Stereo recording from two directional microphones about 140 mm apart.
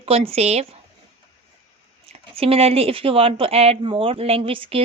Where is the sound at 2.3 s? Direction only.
45° right (ahead or behind).